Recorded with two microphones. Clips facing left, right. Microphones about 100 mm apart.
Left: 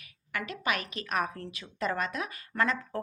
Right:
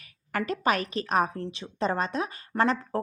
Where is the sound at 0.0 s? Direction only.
40° right (ahead or behind).